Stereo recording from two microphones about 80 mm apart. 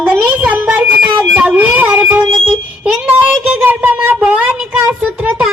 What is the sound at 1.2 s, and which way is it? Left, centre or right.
Music, centre.